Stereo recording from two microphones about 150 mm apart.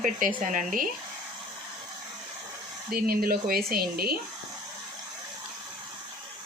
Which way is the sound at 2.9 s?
80° right.